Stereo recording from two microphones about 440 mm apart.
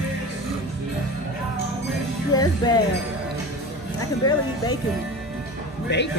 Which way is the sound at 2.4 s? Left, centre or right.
Centre.